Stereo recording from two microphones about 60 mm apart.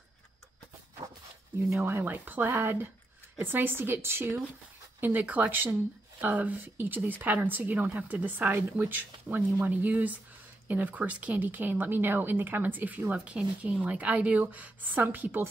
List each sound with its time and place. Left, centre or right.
1.6 s speech: right
5.0 s speech: right